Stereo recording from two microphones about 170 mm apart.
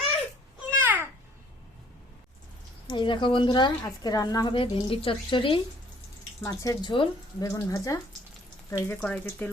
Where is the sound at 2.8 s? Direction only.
30° left (ahead or behind).